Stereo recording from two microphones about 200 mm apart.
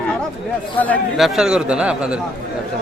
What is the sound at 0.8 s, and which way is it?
A man's voice, 5° left (ahead or behind).